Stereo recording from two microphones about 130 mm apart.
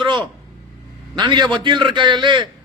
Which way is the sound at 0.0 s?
40° right (ahead or behind).